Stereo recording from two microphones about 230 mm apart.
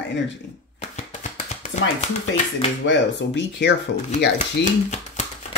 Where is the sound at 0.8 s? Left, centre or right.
Left.